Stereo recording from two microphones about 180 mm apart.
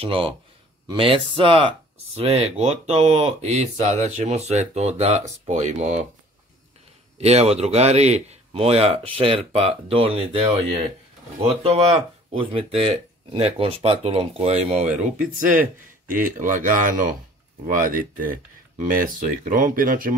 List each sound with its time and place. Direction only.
0.0 s speech: 30° right (ahead or behind)
7.2 s speech: 35° right (ahead or behind)